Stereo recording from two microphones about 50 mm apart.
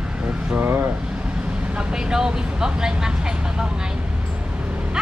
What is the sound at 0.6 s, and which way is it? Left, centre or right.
Vehicle, right.